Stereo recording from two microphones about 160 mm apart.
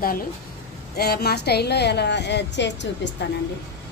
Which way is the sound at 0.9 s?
80° left.